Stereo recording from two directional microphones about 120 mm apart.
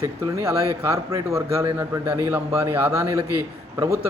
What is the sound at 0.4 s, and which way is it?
A man's voice, 25° right (ahead or behind).